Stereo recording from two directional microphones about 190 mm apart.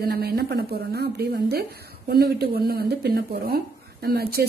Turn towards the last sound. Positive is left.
turn(degrees=-55)  # may be behind; listen again after turning